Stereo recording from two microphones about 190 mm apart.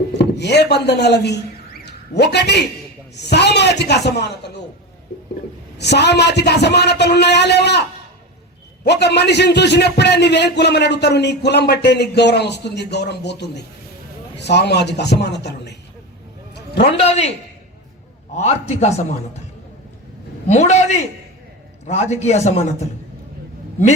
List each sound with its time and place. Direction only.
0.1 s a man's voice: 65° left (ahead or behind)
5.7 s a man's voice: 60° left (ahead or behind)
16.8 s speech: 35° left (ahead or behind)
18.3 s speech: 35° left (ahead or behind)
20.5 s speech: 35° left (ahead or behind)